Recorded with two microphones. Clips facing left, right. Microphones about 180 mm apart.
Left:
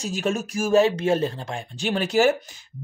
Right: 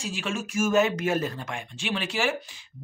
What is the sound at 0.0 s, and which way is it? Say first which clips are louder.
Speech: left 6 dB; 40° left (ahead or behind).